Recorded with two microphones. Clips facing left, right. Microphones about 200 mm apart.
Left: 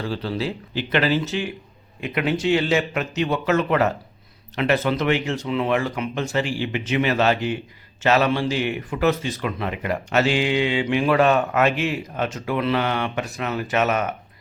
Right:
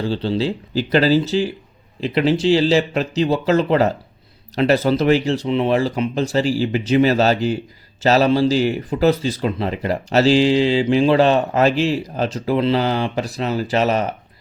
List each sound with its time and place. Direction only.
0.0 s speech: 30° right (ahead or behind)